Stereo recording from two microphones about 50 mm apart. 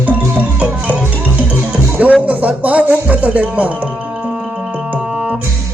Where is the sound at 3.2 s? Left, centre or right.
Right.